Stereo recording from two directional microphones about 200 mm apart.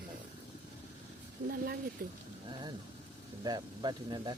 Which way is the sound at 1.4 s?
50° right (ahead or behind).